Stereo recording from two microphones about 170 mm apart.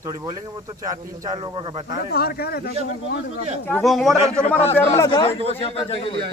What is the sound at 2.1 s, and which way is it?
Speech, 65° left (ahead or behind).